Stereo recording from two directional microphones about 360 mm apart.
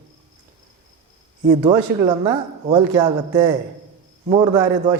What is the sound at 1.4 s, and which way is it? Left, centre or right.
Speech, centre.